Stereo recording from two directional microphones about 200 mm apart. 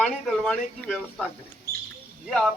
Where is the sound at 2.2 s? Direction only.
Centre (ahead or behind).